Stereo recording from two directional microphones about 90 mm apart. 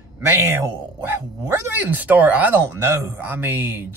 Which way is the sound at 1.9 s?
15° right (ahead or behind).